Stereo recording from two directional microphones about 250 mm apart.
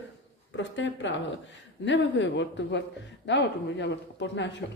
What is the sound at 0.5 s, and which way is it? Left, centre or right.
Speech, left.